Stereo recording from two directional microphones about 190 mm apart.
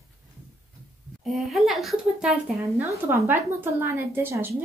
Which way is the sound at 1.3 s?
Centre (ahead or behind).